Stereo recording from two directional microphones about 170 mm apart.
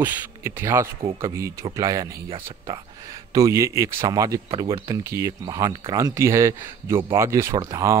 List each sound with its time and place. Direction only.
0.0 s speech: 15° right (ahead or behind)